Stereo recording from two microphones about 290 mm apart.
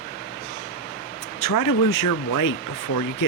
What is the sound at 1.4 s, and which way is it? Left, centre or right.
Speech, left.